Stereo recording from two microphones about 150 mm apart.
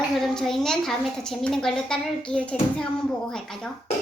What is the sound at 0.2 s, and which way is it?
A woman's voice, centre (ahead or behind).